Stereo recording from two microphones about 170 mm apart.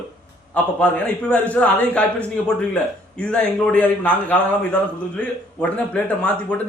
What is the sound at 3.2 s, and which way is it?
Speech, 5° left (ahead or behind).